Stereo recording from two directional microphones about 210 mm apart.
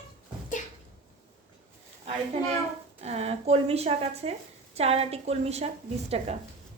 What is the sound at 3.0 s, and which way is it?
A woman's voice, 30° right (ahead or behind).